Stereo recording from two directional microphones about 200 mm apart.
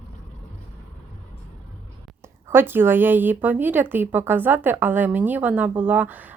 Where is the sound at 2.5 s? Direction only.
10° right (ahead or behind).